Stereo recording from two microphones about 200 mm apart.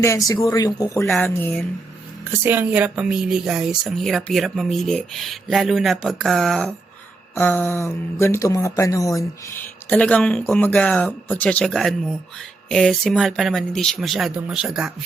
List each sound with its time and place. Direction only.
0.0 s speech: 15° left (ahead or behind)
2.4 s speech: 10° right (ahead or behind)
7.3 s speech: 10° left (ahead or behind)